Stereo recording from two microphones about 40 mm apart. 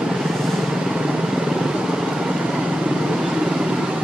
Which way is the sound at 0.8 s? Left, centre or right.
Centre.